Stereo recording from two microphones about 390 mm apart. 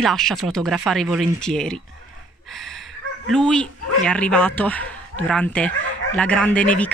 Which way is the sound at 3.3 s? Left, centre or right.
Centre.